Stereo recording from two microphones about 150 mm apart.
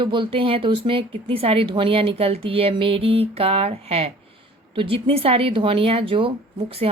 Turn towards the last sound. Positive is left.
turn(degrees=-40)  # may be behind; listen again after turning